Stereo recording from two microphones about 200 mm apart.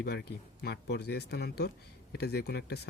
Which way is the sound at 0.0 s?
55° left (ahead or behind).